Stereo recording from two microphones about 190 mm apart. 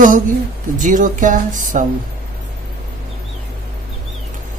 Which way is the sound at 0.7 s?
40° right (ahead or behind).